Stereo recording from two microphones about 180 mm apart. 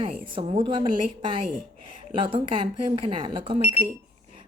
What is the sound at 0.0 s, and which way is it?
A woman's voice, 30° right (ahead or behind).